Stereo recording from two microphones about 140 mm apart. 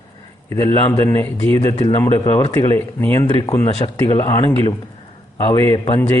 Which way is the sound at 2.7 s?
15° left (ahead or behind).